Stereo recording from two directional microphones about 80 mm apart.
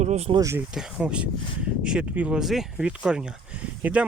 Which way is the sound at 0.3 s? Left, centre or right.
Right.